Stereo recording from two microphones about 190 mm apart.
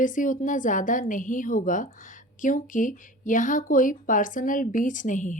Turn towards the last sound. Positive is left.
turn(degrees=40)  # may be behind; listen again after turning